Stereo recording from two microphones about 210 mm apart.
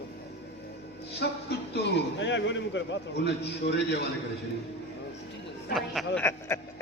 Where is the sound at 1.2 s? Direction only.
50° left (ahead or behind).